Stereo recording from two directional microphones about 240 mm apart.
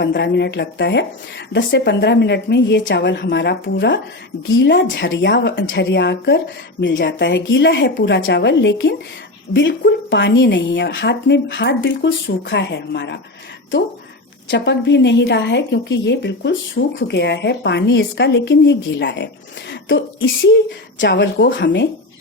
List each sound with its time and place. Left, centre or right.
0.0 s a woman's voice: left
14.5 s a woman's voice: left